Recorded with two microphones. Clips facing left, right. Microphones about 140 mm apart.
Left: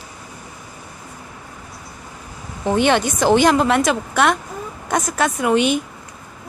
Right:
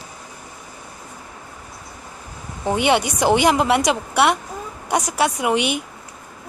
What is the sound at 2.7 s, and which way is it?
A woman's voice, 15° right (ahead or behind).